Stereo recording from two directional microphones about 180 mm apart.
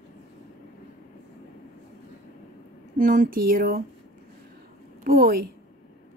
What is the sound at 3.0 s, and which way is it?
Speech, 50° right (ahead or behind).